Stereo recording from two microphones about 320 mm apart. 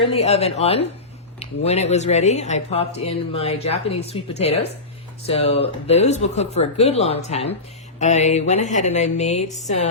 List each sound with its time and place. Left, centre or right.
0.0 s speech: centre